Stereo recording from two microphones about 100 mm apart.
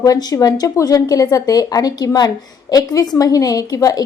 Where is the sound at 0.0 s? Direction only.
40° left (ahead or behind).